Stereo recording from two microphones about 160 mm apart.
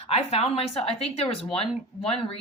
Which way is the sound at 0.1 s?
40° left (ahead or behind).